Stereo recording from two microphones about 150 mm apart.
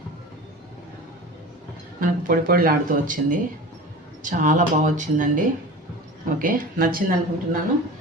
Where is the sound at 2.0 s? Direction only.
70° right (ahead or behind).